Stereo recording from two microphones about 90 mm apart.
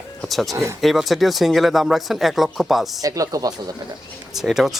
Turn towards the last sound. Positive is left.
turn(degrees=-5)  # may be behind; listen again after turning